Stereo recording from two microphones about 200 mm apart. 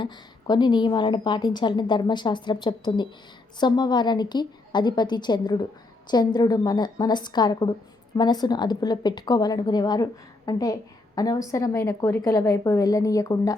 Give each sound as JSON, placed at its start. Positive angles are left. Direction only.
{"t": 0.0, "sound": "a woman's voice", "side_deg": 20}